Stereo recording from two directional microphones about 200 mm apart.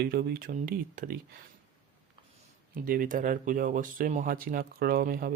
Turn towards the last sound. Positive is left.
turn(degrees=-45)  # may be behind; listen again after turning